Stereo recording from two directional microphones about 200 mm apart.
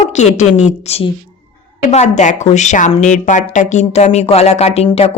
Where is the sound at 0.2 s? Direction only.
35° left (ahead or behind).